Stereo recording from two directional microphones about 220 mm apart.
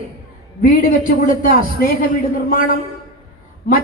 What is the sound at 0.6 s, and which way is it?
Speech, 40° left (ahead or behind).